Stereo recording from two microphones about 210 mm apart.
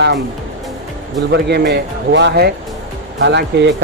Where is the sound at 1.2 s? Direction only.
50° right (ahead or behind).